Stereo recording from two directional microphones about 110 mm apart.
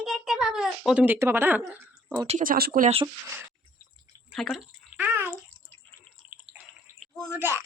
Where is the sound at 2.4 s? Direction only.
50° right (ahead or behind).